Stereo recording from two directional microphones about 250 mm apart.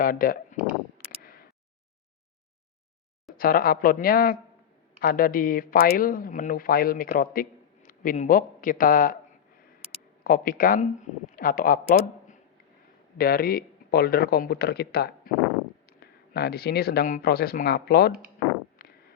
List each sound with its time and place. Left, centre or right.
0.0 s speech: left
0.9 s a sound: left
3.3 s speech: left
10.2 s speech: left